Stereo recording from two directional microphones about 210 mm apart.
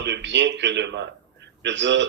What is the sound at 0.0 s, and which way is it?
A man's voice, 60° right (ahead or behind).